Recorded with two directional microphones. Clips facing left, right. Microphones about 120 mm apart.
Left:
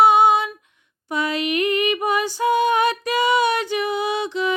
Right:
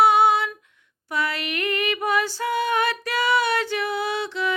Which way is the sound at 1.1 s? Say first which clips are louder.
Left 5 dB; 20° left (ahead or behind).